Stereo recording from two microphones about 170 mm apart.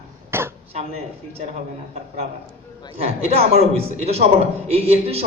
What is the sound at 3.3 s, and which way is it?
A man's voice, 35° right (ahead or behind).